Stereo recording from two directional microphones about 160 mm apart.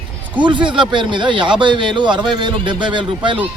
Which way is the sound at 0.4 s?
30° right (ahead or behind).